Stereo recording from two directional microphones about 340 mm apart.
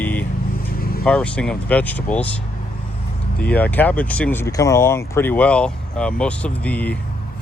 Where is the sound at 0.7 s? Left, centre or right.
Left.